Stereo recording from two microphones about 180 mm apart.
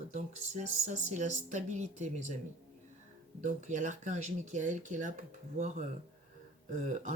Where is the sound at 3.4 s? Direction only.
40° right (ahead or behind).